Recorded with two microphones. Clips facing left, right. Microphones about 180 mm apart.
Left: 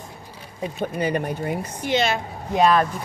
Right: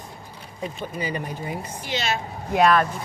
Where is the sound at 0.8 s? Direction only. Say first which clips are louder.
Left 7 dB; 60° left (ahead or behind).